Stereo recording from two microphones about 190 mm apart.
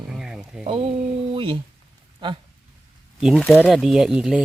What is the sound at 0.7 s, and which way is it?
Speech, 30° right (ahead or behind).